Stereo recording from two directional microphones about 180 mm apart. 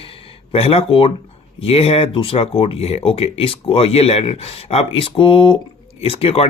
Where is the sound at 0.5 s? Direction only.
35° left (ahead or behind).